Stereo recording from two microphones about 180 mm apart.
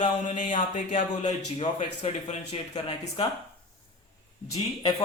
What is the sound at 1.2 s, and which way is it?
Speech, 35° left (ahead or behind).